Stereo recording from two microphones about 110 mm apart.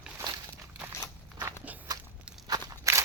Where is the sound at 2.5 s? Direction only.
35° right (ahead or behind).